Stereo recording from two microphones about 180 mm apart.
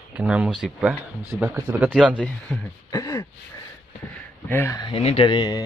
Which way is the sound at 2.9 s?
20° left (ahead or behind).